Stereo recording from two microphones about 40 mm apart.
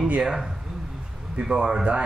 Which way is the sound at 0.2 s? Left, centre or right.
Centre.